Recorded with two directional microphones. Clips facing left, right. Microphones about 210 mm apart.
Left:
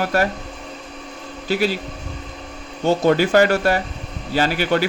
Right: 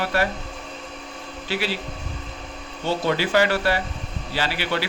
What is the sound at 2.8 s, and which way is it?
A man's voice, 45° left (ahead or behind).